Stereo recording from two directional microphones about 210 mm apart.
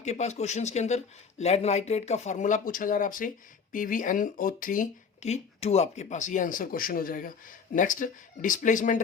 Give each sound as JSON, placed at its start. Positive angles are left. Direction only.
{"t": 0.0, "sound": "speech", "side_deg": 35}